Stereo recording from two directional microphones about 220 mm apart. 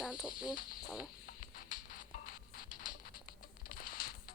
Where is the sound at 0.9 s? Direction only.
Centre (ahead or behind).